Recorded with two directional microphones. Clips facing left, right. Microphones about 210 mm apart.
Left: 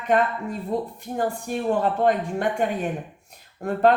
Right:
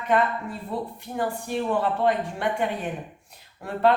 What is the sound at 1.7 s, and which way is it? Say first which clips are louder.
Speech: left 3 dB; 45° left (ahead or behind).